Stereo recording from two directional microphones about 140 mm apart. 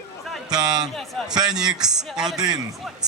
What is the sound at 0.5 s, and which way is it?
Speech, 30° right (ahead or behind).